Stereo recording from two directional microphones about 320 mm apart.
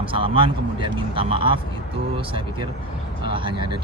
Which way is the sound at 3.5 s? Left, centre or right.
Left.